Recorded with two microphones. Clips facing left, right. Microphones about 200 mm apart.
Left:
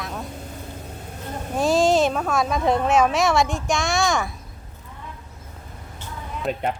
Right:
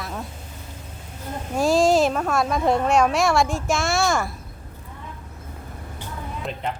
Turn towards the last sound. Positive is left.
turn(degrees=5)  # may be behind; listen again after turning